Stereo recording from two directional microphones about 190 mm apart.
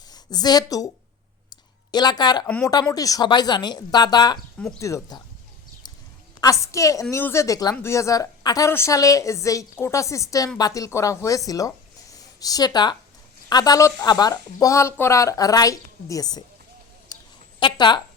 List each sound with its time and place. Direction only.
0.1 s a woman's voice: 20° left (ahead or behind)
1.9 s a woman's voice: 20° left (ahead or behind)
6.4 s a woman's voice: 15° left (ahead or behind)
17.6 s speech: 25° left (ahead or behind)